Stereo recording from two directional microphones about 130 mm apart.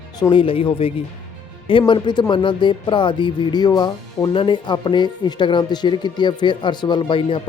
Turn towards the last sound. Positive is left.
turn(degrees=40)  # may be behind; listen again after turning